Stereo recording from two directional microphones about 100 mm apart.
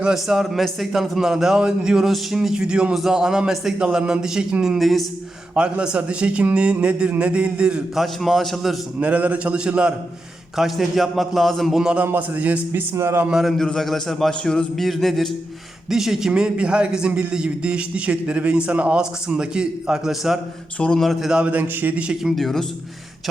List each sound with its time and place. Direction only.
0.0 s a man's voice: 5° right (ahead or behind)
8.0 s a man's voice: centre (ahead or behind)
9.0 s a man's voice: 15° right (ahead or behind)
12.0 s speech: 20° right (ahead or behind)
13.2 s a man's voice: 5° right (ahead or behind)
13.6 s a man's voice: 5° left (ahead or behind)
20.7 s a man's voice: 10° left (ahead or behind)